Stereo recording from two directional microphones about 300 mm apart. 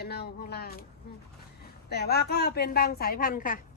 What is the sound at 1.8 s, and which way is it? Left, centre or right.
Speech, left.